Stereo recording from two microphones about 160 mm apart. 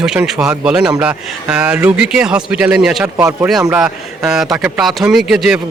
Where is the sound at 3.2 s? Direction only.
20° right (ahead or behind).